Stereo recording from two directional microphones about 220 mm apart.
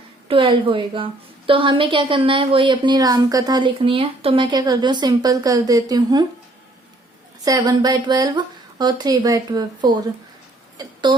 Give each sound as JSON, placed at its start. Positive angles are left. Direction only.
{"t": 0.3, "sound": "a woman's voice", "side_deg": -25}
{"t": 7.4, "sound": "a woman's voice", "side_deg": -15}
{"t": 10.8, "sound": "a sound", "side_deg": -20}